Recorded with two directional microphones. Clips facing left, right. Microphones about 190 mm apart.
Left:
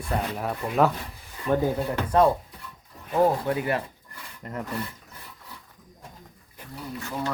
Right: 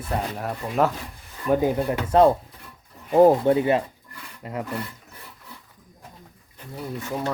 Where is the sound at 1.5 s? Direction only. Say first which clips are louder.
Right 3 dB; 15° right (ahead or behind).